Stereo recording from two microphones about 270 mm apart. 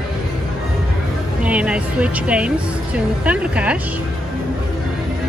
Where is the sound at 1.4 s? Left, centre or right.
Centre.